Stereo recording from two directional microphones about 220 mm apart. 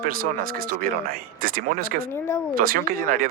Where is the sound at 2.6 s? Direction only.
40° right (ahead or behind).